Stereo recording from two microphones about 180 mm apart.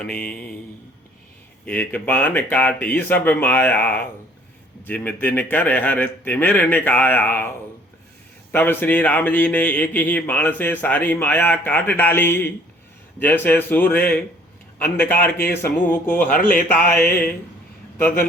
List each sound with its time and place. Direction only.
0.0 s speech: 5° left (ahead or behind)
1.6 s a man's voice: 10° left (ahead or behind)
8.5 s a man's voice: 10° left (ahead or behind)
16.2 s speech: 50° left (ahead or behind)